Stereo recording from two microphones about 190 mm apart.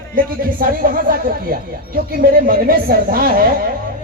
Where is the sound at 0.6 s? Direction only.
50° right (ahead or behind).